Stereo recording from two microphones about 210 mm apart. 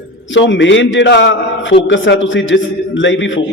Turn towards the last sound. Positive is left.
turn(degrees=60)  # may be behind; listen again after turning